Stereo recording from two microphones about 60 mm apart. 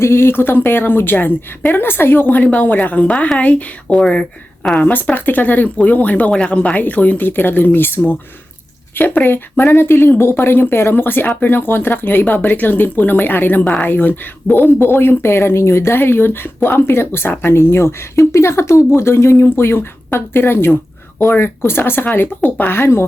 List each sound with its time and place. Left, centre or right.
0.0 s speech: left
4.2 s a woman's voice: centre
4.8 s speech: left